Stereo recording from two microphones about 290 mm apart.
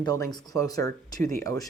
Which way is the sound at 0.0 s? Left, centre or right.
Centre.